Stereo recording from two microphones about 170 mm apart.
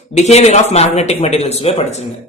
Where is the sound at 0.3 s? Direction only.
40° left (ahead or behind).